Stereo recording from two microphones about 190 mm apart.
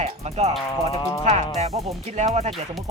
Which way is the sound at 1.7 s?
15° right (ahead or behind).